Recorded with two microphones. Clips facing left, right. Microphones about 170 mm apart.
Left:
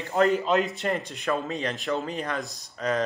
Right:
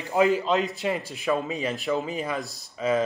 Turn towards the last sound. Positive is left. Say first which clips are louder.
# right 3 dB
turn(degrees=-5)  # may be behind; listen again after turning